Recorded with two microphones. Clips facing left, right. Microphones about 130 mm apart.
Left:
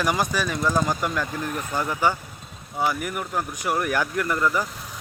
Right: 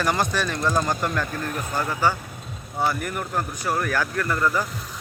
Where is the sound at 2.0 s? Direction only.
20° left (ahead or behind).